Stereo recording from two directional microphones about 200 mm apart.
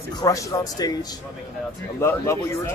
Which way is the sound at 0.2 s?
20° left (ahead or behind).